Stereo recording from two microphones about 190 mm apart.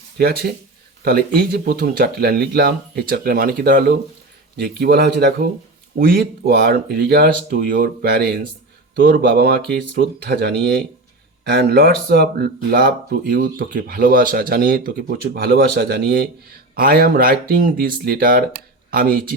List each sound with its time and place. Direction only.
0.2 s speech: 55° right (ahead or behind)
9.0 s speech: 70° right (ahead or behind); by 19.2 s 55° right (ahead or behind)